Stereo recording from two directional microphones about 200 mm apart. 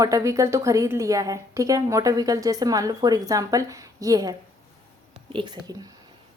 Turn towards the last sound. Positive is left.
turn(degrees=-20)  # may be behind; listen again after turning